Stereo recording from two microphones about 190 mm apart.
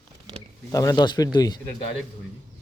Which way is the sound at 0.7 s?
20° left (ahead or behind).